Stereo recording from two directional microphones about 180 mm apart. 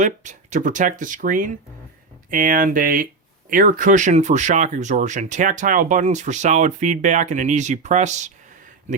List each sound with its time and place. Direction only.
0.0 s speech: 45° right (ahead or behind)